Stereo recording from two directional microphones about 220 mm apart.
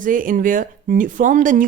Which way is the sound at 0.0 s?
40° right (ahead or behind).